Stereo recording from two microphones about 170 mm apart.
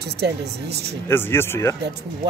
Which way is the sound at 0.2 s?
75° right (ahead or behind).